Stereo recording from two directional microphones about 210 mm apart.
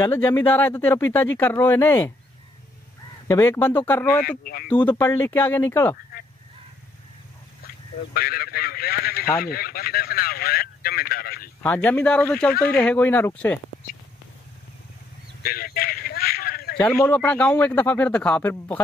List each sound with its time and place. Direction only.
0.0 s speech: 10° left (ahead or behind)
3.3 s speech: 15° left (ahead or behind)
4.2 s speech: 45° left (ahead or behind)
4.7 s speech: 15° left (ahead or behind)
7.6 s a sound: 45° left (ahead or behind)
9.4 s speech: 45° left (ahead or behind)
11.6 s speech: 10° left (ahead or behind)
15.4 s a sound: 45° left (ahead or behind)
16.7 s speech: 10° left (ahead or behind)